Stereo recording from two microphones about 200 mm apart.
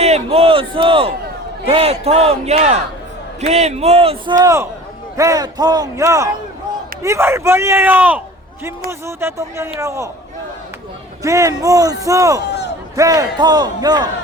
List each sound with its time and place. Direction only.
0.0 s a sound: 30° right (ahead or behind)
1.6 s a man's voice: 30° right (ahead or behind)
11.2 s a man's voice: 15° right (ahead or behind)